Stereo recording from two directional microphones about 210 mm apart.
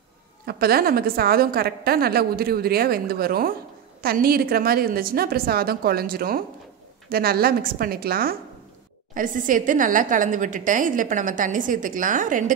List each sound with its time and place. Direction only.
0.5 s a woman's voice: 45° right (ahead or behind)